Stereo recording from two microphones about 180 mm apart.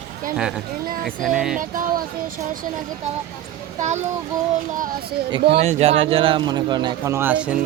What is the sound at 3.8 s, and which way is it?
Speech, 40° right (ahead or behind).